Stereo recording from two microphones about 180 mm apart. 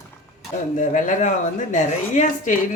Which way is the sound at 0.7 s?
45° left (ahead or behind).